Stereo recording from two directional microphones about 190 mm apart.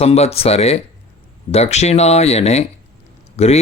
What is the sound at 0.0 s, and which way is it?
Speech, 35° left (ahead or behind).